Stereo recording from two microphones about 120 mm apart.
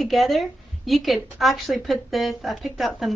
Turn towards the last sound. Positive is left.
turn(degrees=0)  # may be behind; listen again after turning